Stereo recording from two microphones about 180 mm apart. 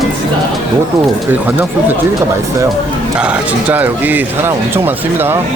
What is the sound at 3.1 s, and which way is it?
Speech, 5° right (ahead or behind).